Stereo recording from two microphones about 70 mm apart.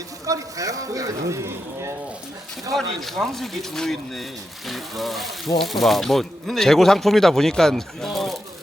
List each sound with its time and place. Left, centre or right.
0.3 s speech: right
2.7 s speech: centre